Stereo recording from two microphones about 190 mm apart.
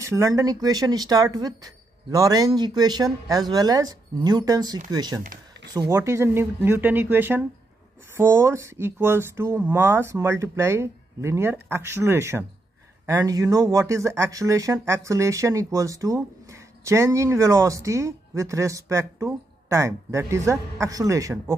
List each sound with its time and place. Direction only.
0.0 s speech: 15° right (ahead or behind)